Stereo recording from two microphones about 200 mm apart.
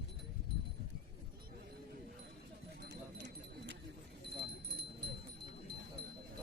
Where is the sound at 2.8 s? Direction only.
60° right (ahead or behind).